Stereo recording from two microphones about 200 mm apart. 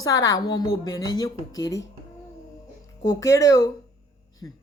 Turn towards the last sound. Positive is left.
turn(degrees=15)  # may be behind; listen again after turning